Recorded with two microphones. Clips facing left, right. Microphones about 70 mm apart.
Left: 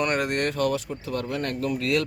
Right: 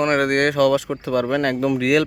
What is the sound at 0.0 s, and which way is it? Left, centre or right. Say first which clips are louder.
Speech: right 7 dB; right.